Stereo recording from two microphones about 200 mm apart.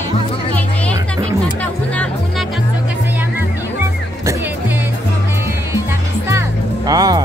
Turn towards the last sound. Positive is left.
turn(degrees=-20)  # may be behind; listen again after turning